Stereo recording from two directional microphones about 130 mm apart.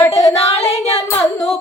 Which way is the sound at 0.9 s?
20° left (ahead or behind).